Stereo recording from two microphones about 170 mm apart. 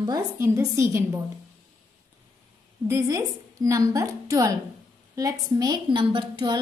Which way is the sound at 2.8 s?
20° right (ahead or behind).